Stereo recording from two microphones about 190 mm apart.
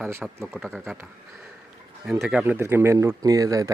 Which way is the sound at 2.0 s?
5° right (ahead or behind).